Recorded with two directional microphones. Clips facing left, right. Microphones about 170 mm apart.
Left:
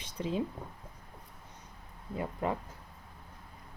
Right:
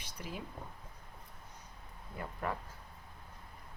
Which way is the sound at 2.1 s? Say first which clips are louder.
Left 6 dB; 20° left (ahead or behind).